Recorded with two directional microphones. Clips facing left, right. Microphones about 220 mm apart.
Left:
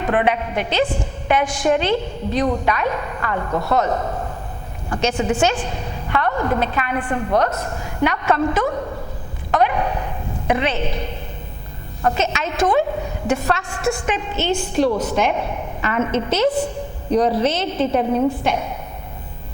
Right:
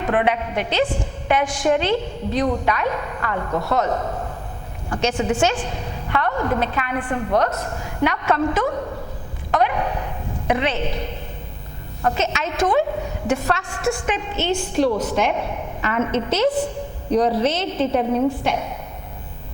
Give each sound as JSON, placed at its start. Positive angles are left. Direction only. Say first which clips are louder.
{"t": 0.0, "sound": "a woman's voice", "louder": "left 1 dB", "side_deg": 15}
{"t": 9.5, "sound": "a sound", "louder": "left 2 dB", "side_deg": 15}
{"t": 12.0, "sound": "a woman's voice", "louder": "left 1 dB", "side_deg": 10}